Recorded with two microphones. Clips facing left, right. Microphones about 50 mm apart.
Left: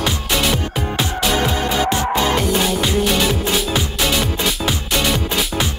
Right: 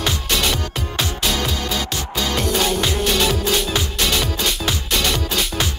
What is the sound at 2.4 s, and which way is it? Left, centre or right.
Music, centre.